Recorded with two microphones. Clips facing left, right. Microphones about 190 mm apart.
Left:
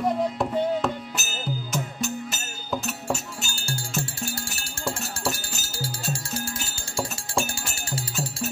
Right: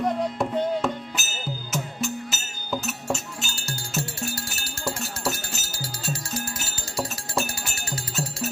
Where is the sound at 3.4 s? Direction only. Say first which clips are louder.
Left 2 dB; 30° left (ahead or behind).